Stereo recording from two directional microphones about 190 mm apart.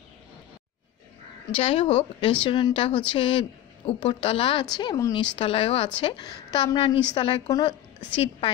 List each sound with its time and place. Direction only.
1.5 s a woman's voice: 30° left (ahead or behind)